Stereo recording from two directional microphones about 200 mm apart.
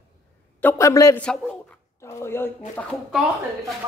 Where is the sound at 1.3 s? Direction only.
5° left (ahead or behind).